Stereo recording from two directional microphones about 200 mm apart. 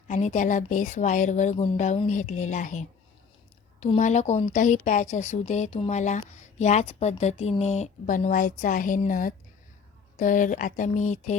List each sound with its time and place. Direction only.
0.1 s a woman's voice: 35° left (ahead or behind)